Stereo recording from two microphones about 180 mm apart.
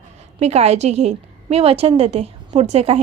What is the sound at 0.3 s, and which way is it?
A woman's voice, 35° right (ahead or behind).